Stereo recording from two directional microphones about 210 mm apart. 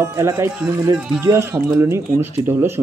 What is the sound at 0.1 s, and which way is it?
Speech, 10° right (ahead or behind).